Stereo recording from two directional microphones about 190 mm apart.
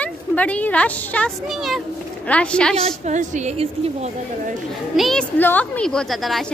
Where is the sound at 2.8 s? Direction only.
35° right (ahead or behind).